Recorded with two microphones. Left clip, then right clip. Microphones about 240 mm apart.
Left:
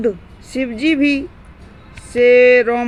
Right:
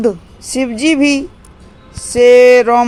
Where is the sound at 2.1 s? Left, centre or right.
Right.